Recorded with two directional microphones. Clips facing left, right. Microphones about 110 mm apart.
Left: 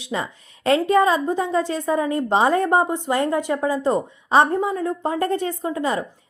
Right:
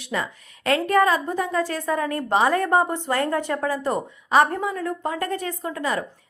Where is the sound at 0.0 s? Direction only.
25° left (ahead or behind).